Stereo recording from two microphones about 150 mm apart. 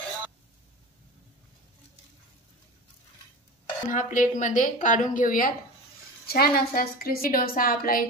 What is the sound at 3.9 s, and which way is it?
A woman's voice, 60° left (ahead or behind).